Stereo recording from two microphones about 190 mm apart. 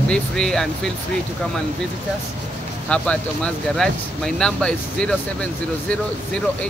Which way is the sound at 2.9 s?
5° left (ahead or behind).